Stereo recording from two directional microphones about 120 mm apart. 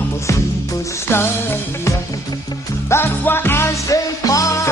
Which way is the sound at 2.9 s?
20° left (ahead or behind).